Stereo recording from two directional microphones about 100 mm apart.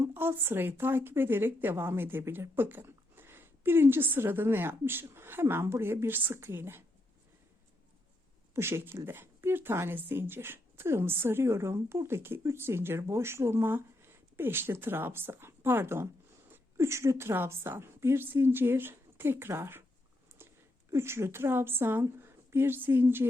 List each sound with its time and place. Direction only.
0.0 s speech: 20° right (ahead or behind)
8.5 s a woman's voice: 25° right (ahead or behind)
20.4 s a sound: 25° right (ahead or behind)
20.9 s speech: 25° right (ahead or behind)